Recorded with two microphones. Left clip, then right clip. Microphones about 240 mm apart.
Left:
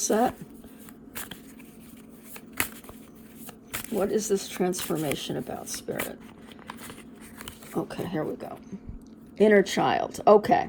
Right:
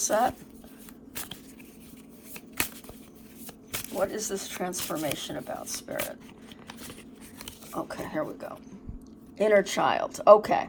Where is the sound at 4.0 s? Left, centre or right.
Left.